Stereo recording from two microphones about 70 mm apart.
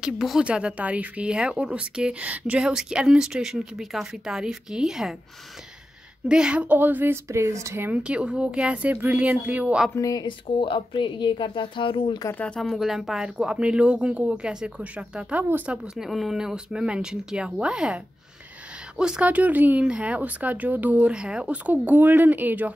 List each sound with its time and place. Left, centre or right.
0.0 s speech: centre
6.2 s speech: centre
7.2 s speech: right
8.0 s speech: centre
9.9 s speech: left
12.2 s speech: left
12.5 s speech: centre
16.1 s speech: centre
19.2 s speech: right